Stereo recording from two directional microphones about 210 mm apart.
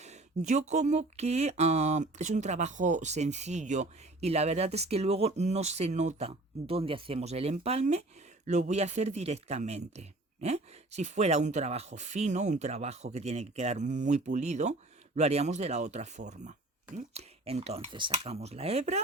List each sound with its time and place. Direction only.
0.0 s speech: 35° right (ahead or behind)